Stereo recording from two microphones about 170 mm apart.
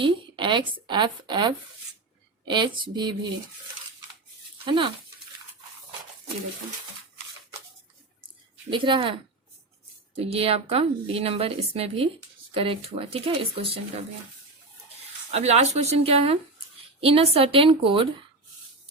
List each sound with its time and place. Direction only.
0.0 s a woman's voice: 30° right (ahead or behind)
4.6 s speech: 30° right (ahead or behind)
8.7 s a woman's voice: 30° right (ahead or behind)
15.3 s a woman's voice: 40° right (ahead or behind)